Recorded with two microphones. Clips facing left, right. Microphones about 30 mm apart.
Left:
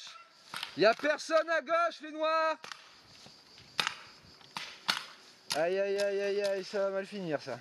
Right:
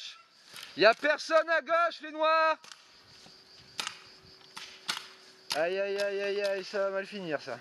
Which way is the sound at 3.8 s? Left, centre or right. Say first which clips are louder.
Left 5 dB; left.